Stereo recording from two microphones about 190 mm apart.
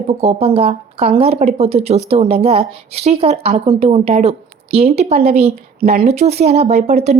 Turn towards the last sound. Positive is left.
turn(degrees=-35)  # may be behind; listen again after turning